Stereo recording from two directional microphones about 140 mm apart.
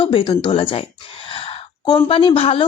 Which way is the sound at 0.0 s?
35° left (ahead or behind).